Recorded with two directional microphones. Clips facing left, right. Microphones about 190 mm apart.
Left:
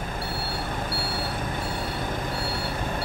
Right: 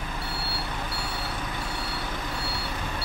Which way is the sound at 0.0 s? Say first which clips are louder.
Left 3 dB; 50° left (ahead or behind).